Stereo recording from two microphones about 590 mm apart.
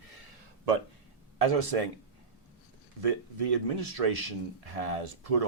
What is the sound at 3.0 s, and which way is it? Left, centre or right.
Speech, right.